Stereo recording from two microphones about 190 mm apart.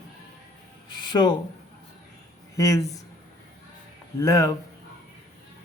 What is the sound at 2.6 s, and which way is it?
Speech, 15° left (ahead or behind).